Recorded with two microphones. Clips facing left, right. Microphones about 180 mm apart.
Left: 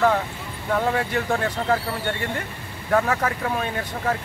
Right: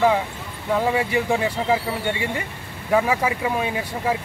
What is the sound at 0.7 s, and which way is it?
Speech, 10° right (ahead or behind).